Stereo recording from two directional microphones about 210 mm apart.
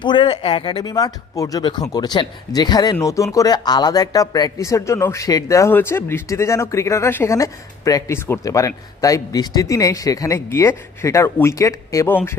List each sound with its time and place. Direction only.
0.0 s speech: 20° left (ahead or behind)